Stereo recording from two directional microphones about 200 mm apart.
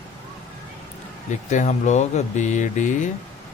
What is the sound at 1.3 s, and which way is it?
Speech, 35° left (ahead or behind).